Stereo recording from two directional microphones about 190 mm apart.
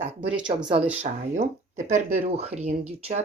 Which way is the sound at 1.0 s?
35° right (ahead or behind).